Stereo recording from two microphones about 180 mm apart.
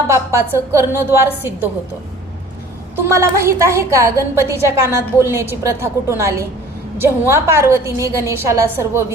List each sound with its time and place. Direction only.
0.1 s a woman's voice: 15° right (ahead or behind)
2.9 s a woman's voice: 15° right (ahead or behind)